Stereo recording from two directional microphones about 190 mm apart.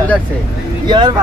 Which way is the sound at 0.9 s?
25° right (ahead or behind).